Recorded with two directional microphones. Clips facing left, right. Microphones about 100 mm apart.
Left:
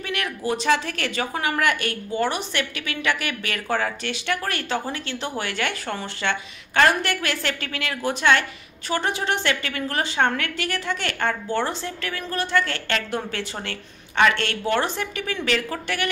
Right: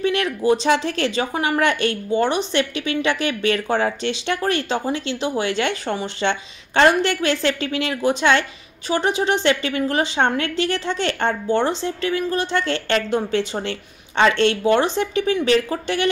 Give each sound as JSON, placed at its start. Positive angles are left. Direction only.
{"t": 0.0, "sound": "speech", "side_deg": -25}